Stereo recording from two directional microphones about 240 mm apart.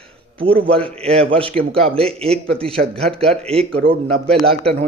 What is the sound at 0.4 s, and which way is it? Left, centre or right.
Speech, right.